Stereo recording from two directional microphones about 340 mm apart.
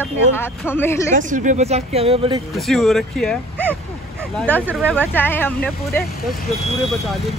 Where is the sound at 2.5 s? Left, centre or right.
Centre.